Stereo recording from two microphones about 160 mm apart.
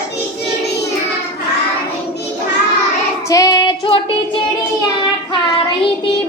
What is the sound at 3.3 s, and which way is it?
Child singing, 20° left (ahead or behind).